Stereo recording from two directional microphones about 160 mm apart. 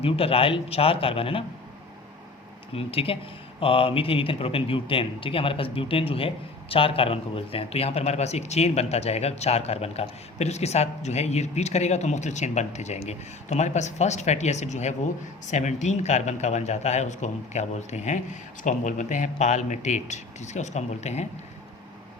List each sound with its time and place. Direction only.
0.0 s a man's voice: 35° left (ahead or behind)
2.7 s a man's voice: 35° left (ahead or behind)